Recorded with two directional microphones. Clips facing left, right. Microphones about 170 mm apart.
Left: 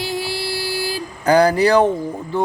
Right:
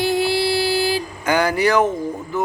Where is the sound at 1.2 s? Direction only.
35° left (ahead or behind).